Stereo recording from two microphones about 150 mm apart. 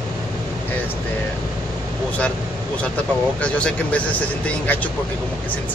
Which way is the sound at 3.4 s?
10° left (ahead or behind).